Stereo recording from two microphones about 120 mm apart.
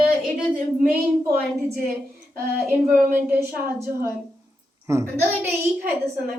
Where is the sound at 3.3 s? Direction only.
20° right (ahead or behind).